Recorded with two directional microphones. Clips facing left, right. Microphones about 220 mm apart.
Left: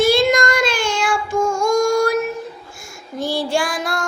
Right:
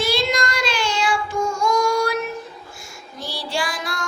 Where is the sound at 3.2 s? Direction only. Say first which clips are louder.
Left 7 dB; 50° left (ahead or behind).